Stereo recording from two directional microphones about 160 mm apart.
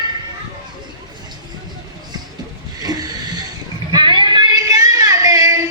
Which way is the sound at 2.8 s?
25° right (ahead or behind).